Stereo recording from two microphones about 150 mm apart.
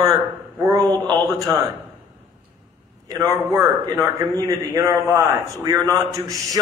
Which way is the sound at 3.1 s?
15° right (ahead or behind).